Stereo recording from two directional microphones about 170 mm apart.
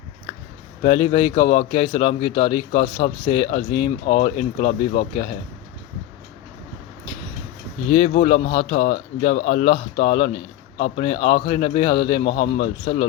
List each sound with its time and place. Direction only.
0.8 s a man's voice: 30° left (ahead or behind)
7.9 s speech: 35° left (ahead or behind)